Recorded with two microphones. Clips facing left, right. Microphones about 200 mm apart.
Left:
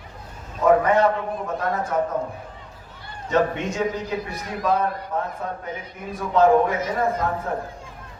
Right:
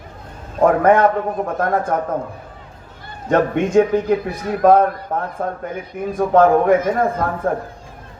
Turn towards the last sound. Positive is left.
turn(degrees=-50)  # may be behind; listen again after turning